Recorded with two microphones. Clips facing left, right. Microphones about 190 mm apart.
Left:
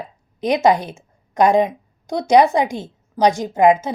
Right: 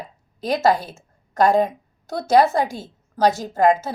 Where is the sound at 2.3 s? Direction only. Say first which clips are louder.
Left 3 dB; 15° left (ahead or behind).